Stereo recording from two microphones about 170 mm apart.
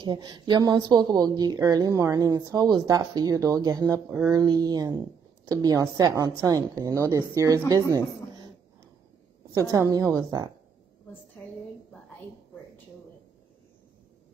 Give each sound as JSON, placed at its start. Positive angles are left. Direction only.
{"t": 0.0, "sound": "a woman's voice", "side_deg": -25}
{"t": 9.5, "sound": "a woman's voice", "side_deg": -20}